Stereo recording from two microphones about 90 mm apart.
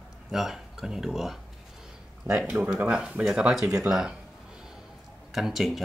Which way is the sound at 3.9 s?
5° right (ahead or behind).